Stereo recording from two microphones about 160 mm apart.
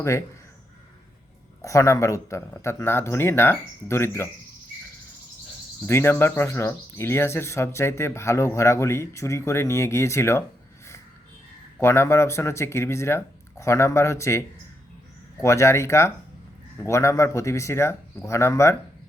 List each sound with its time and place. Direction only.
0.0 s speech: 20° left (ahead or behind)
1.6 s speech: 20° left (ahead or behind)
5.8 s speech: 15° left (ahead or behind)
11.8 s speech: 15° left (ahead or behind)